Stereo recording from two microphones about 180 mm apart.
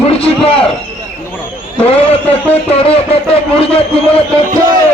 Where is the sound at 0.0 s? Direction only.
30° left (ahead or behind).